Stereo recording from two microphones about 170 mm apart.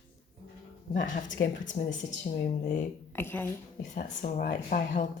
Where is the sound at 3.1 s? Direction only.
10° left (ahead or behind).